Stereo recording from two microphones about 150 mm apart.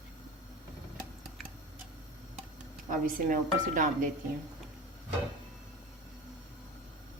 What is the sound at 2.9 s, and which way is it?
Speech, 60° right (ahead or behind).